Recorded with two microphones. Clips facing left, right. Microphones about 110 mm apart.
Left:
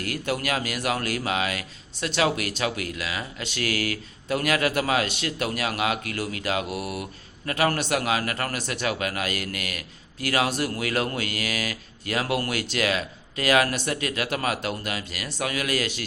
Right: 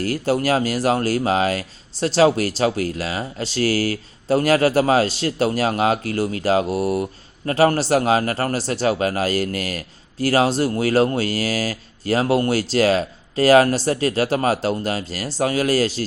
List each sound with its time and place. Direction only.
0.0 s speech: 35° right (ahead or behind)